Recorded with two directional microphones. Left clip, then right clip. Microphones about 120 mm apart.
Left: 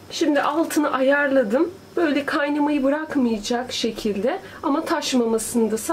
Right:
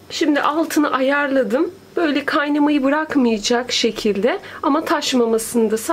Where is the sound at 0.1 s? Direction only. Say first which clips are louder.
Right 3 dB; 40° right (ahead or behind).